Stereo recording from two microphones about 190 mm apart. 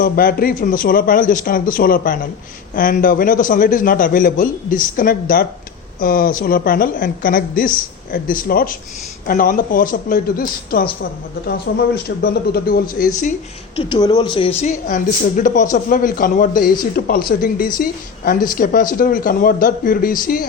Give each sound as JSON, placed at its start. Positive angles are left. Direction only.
{"t": 0.0, "sound": "speech", "side_deg": 50}
{"t": 13.7, "sound": "speech", "side_deg": 25}